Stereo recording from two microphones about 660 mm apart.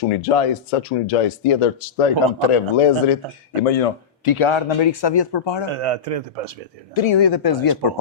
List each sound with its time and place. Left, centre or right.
0.0 s speech: left
5.6 s a man's voice: right
6.9 s speech: left